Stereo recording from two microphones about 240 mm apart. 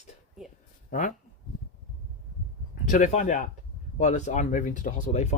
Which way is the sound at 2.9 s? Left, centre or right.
Left.